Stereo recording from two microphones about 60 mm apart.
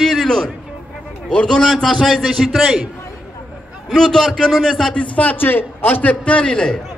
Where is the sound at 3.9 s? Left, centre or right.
Centre.